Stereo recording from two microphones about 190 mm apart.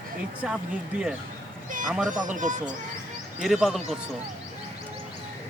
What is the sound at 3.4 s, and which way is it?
Speech, centre (ahead or behind).